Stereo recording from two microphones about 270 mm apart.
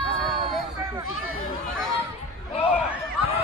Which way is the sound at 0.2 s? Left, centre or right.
Centre.